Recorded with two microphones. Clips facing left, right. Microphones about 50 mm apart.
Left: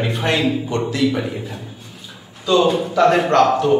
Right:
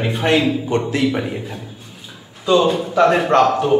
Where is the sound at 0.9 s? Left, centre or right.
Right.